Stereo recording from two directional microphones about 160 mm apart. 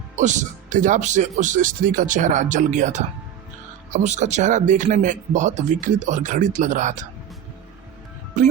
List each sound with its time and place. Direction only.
0.2 s speech: 50° right (ahead or behind)
8.4 s speech: 50° right (ahead or behind)